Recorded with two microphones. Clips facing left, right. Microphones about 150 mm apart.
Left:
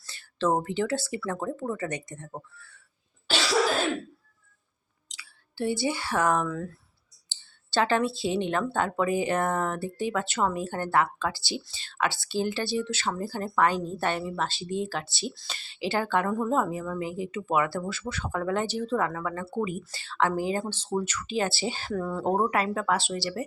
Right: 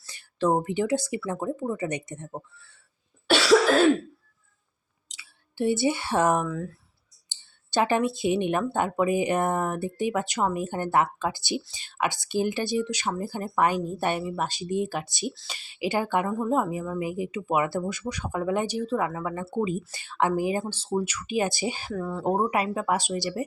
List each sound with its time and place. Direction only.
0.0 s speech: 15° right (ahead or behind)
5.1 s speech: 20° right (ahead or behind)
6.4 s speech: 5° right (ahead or behind)
7.3 s speech: 15° right (ahead or behind)